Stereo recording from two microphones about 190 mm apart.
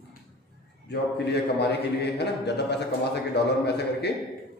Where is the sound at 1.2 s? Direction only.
60° left (ahead or behind).